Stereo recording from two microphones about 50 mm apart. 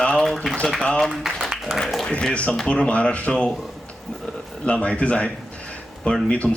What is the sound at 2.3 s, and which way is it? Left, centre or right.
Speech, left.